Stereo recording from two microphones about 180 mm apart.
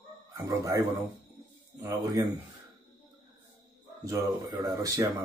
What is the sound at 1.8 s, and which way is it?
Speech, 20° right (ahead or behind).